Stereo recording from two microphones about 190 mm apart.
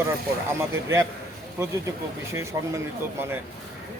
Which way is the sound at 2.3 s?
15° right (ahead or behind).